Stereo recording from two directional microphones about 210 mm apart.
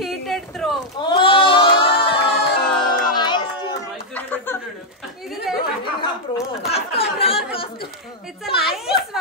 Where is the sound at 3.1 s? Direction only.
20° left (ahead or behind).